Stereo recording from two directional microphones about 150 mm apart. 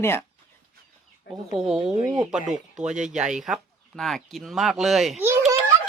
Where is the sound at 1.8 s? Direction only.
20° right (ahead or behind).